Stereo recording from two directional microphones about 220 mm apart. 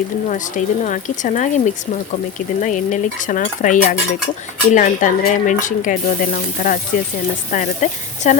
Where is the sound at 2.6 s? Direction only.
35° left (ahead or behind).